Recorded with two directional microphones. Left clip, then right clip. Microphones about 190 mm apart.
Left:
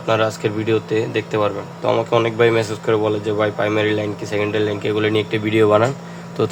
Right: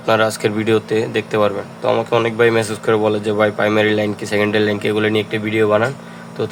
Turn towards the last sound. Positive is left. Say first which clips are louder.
# left 2 dB
turn(degrees=10)  # may be behind; listen again after turning